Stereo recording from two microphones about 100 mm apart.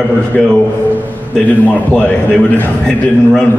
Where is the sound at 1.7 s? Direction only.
10° left (ahead or behind).